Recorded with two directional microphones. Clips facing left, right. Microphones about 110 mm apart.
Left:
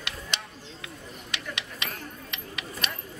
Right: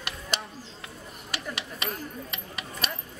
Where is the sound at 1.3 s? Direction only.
40° right (ahead or behind).